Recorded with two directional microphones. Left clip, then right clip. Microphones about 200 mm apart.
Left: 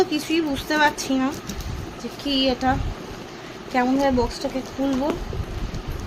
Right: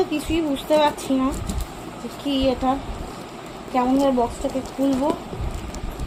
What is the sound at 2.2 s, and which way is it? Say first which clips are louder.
Speech: even; 40° left (ahead or behind).